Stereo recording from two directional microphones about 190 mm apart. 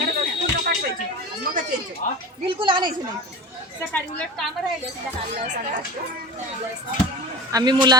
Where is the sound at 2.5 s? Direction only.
25° right (ahead or behind).